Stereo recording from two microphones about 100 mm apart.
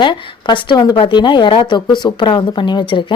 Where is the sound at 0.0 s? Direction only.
55° left (ahead or behind).